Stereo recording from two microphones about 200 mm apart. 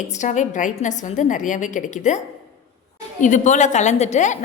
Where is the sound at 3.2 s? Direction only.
35° left (ahead or behind).